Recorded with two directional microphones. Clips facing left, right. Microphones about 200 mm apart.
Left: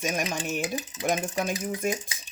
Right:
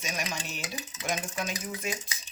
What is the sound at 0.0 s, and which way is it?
Cutlery, 50° left (ahead or behind).